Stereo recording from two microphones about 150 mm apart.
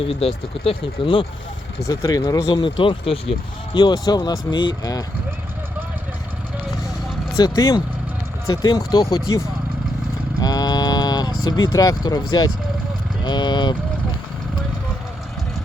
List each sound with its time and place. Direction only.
0.0 s speech: 40° left (ahead or behind)
1.9 s speech: 25° left (ahead or behind)
7.3 s speech: 25° left (ahead or behind)
10.4 s a sound: 25° left (ahead or behind)
13.2 s vehicle: 30° left (ahead or behind)